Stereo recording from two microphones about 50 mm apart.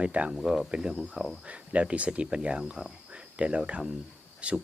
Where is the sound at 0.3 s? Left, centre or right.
Centre.